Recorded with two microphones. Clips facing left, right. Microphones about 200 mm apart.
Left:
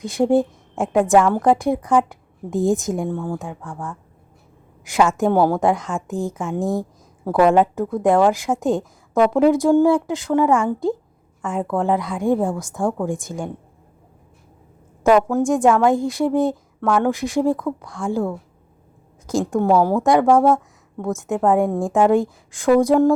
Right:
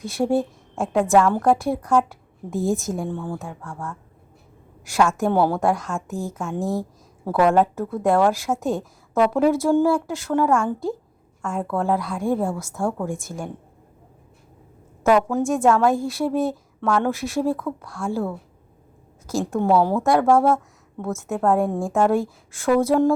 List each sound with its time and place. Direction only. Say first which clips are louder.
0.0 s a woman's voice: left 4 dB; 15° left (ahead or behind)
4.9 s a woman's voice: left 3 dB; 20° left (ahead or behind)
6.6 s speech: left 3 dB; centre (ahead or behind)
7.3 s a woman's voice: left 3 dB; 15° left (ahead or behind)
15.4 s a woman's voice: left 2 dB; 15° left (ahead or behind)
21.0 s a woman's voice: left 3 dB; 15° left (ahead or behind)